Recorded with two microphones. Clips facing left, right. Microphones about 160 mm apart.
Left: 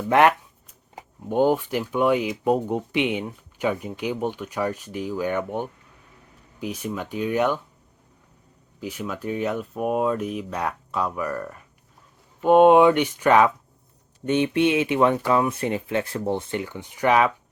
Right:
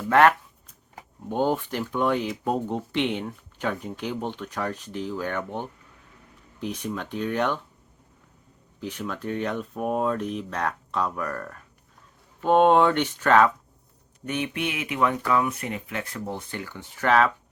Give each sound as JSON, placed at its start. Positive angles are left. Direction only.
{"t": 0.1, "sound": "speech", "side_deg": 15}
{"t": 8.8, "sound": "speech", "side_deg": 10}
{"t": 14.3, "sound": "speech", "side_deg": 25}